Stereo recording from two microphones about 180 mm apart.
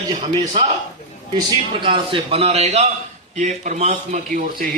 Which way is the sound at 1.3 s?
30° right (ahead or behind).